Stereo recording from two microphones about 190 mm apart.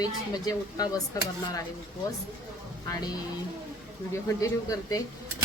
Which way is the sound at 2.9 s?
20° left (ahead or behind).